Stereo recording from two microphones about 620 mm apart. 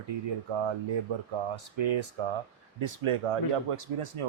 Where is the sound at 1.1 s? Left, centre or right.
Right.